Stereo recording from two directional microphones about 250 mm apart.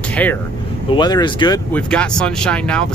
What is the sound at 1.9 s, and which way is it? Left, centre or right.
Speech, centre.